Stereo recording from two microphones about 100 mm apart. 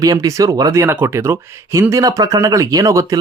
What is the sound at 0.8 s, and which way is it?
Speech, 20° right (ahead or behind).